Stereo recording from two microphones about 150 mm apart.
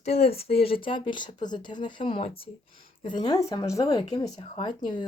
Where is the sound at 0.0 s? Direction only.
45° left (ahead or behind).